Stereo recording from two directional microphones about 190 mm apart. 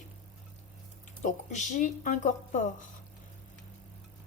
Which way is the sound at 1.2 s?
40° left (ahead or behind).